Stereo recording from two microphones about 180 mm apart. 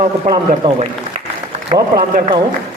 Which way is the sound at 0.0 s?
30° right (ahead or behind).